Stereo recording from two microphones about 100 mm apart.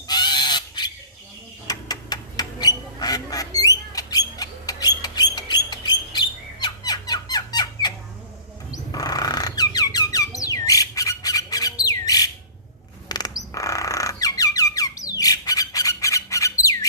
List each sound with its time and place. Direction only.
0.1 s goose: 45° left (ahead or behind)
1.6 s duck: 40° left (ahead or behind)
5.0 s bird: 40° left (ahead or behind)
8.7 s squeak: 40° left (ahead or behind)
13.1 s a sound: 40° left (ahead or behind)